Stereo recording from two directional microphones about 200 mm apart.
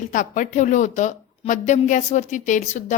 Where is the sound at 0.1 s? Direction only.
40° left (ahead or behind).